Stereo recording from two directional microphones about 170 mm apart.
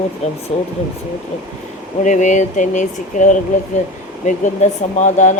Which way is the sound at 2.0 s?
45° left (ahead or behind).